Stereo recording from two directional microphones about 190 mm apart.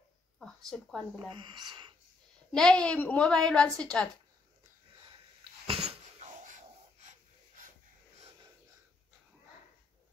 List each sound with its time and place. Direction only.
0.4 s a woman's voice: centre (ahead or behind)
1.3 s speech: 25° right (ahead or behind)
2.5 s a woman's voice: 5° left (ahead or behind)
5.9 s a sound: 35° right (ahead or behind)